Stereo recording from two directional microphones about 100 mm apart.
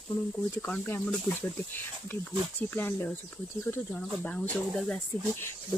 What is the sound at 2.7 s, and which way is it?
Speech, 20° left (ahead or behind).